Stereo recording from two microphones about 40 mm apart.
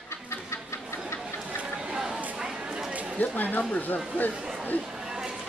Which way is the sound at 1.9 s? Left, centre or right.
Centre.